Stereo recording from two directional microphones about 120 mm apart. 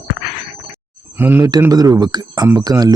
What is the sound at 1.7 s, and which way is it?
Speech, 30° right (ahead or behind).